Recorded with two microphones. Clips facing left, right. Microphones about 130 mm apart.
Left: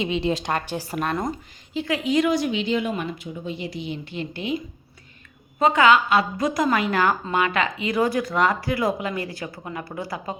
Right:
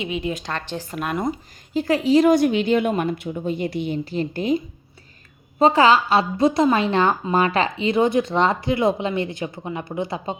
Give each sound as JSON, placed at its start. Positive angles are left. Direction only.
{"t": 0.0, "sound": "speech", "side_deg": 35}
{"t": 0.4, "sound": "speech", "side_deg": 10}
{"t": 1.0, "sound": "speech", "side_deg": -5}
{"t": 1.7, "sound": "speech", "side_deg": -40}
{"t": 2.3, "sound": "a woman's voice", "side_deg": -50}
{"t": 5.5, "sound": "a woman's voice", "side_deg": -30}